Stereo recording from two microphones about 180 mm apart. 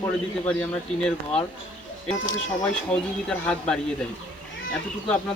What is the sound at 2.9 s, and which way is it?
Speech, 5° left (ahead or behind).